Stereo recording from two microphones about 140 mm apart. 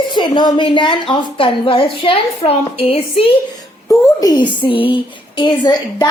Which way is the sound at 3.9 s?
30° left (ahead or behind).